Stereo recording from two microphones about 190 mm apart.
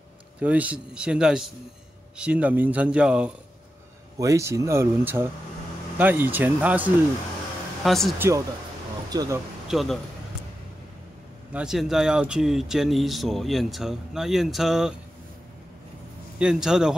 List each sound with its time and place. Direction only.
0.4 s a man's voice: 5° right (ahead or behind)
4.2 s a man's voice: 15° right (ahead or behind); by 8.2 s centre (ahead or behind)
8.2 s a man's voice: 15° right (ahead or behind)
9.7 s a man's voice: centre (ahead or behind)
11.5 s speech: centre (ahead or behind)
16.3 s speech: 5° right (ahead or behind)